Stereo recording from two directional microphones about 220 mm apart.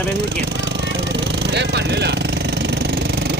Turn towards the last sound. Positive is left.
turn(degrees=-50)  # may be behind; listen again after turning